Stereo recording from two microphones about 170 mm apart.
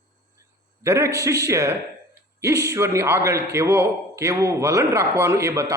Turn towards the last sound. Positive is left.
turn(degrees=-15)  # may be behind; listen again after turning